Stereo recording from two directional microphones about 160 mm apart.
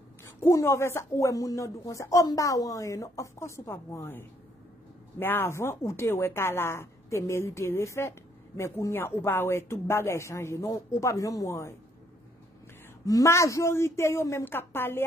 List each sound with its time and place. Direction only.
0.2 s speech: 15° left (ahead or behind)
13.0 s speech: 20° left (ahead or behind)